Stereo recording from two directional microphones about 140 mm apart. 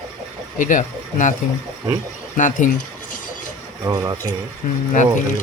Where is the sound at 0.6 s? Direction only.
65° left (ahead or behind).